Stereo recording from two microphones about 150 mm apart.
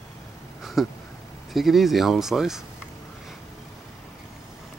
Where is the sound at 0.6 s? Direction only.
Centre (ahead or behind).